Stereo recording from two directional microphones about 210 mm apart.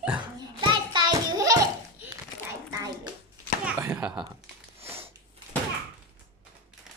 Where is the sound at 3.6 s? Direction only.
10° right (ahead or behind).